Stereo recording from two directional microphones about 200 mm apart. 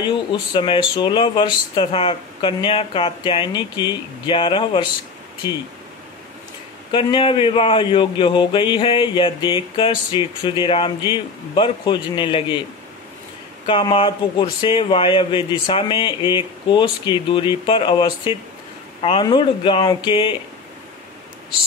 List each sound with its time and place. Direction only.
0.3 s speech: 25° left (ahead or behind)
6.9 s speech: 25° left (ahead or behind)
13.7 s speech: 25° left (ahead or behind)